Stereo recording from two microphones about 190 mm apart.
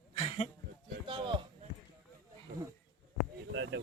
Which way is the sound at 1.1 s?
25° right (ahead or behind).